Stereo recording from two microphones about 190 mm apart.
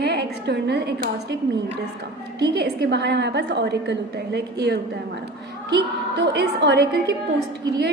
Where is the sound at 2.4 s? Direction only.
60° right (ahead or behind).